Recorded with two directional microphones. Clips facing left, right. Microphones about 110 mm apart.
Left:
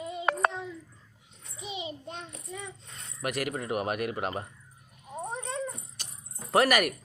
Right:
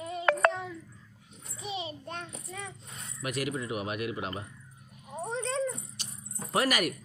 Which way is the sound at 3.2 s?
55° left (ahead or behind).